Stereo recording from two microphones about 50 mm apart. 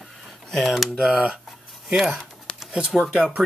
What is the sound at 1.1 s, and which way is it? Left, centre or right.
Speech, centre.